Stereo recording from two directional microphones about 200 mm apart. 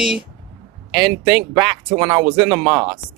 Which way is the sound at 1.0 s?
20° right (ahead or behind).